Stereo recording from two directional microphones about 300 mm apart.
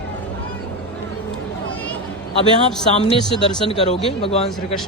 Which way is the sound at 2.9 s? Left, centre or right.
Centre.